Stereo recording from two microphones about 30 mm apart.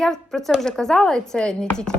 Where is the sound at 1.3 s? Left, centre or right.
Left.